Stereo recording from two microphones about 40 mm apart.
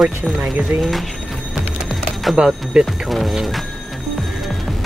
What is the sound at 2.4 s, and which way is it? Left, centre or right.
Speech, right.